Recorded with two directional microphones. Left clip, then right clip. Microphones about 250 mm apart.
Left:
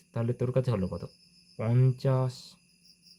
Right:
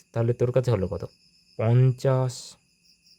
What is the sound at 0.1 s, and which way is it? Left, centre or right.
Speech, right.